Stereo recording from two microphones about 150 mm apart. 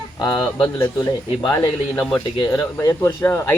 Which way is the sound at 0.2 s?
25° left (ahead or behind).